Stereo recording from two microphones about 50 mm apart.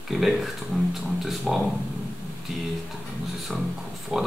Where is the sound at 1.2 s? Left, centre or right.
Centre.